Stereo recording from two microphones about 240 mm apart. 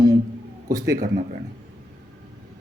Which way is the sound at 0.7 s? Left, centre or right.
Centre.